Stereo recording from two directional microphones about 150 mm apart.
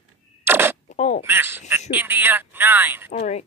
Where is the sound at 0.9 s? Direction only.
50° left (ahead or behind).